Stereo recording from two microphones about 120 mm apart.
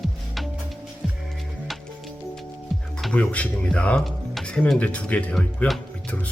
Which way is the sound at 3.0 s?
5° left (ahead or behind).